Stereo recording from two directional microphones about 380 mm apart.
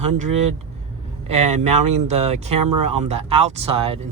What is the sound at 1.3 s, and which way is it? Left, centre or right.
Speech, centre.